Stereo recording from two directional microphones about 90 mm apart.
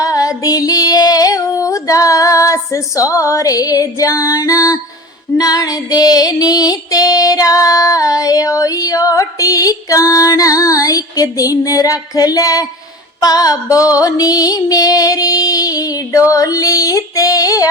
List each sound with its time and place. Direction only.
0.0 s female singing: 40° left (ahead or behind)